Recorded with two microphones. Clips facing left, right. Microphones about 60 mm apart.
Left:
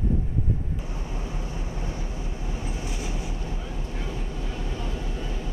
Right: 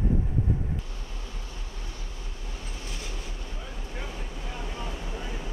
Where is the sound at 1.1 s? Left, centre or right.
Left.